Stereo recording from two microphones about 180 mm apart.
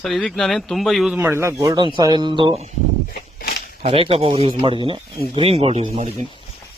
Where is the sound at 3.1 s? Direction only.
55° left (ahead or behind).